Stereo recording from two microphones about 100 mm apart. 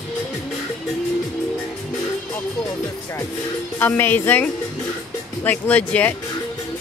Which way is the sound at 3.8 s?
25° left (ahead or behind).